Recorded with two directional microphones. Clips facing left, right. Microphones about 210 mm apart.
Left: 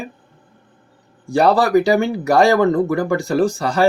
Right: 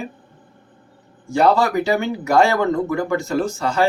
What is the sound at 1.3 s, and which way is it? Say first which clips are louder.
Speech: left 3 dB; 35° left (ahead or behind).